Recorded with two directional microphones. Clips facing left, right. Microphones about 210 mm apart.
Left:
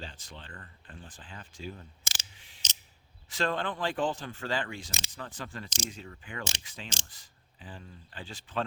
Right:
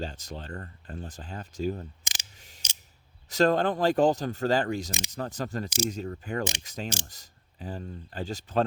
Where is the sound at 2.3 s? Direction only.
40° right (ahead or behind).